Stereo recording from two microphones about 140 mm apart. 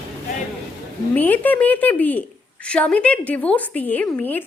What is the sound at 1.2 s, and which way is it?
A woman's voice, 10° left (ahead or behind).